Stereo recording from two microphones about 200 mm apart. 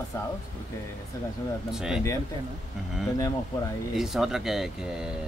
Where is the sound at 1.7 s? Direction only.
Centre (ahead or behind).